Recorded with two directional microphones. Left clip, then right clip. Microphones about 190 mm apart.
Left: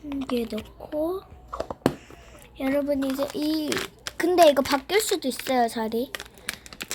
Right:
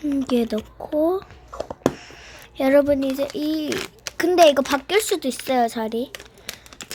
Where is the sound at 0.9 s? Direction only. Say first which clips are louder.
Right 7 dB; 30° right (ahead or behind).